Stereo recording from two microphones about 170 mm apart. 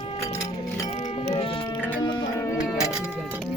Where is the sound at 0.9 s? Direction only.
40° left (ahead or behind).